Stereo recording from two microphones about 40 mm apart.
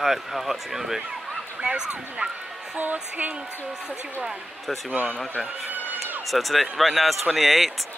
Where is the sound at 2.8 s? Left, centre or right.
Right.